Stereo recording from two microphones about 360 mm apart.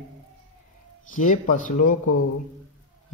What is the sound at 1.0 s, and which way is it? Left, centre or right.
Speech, left.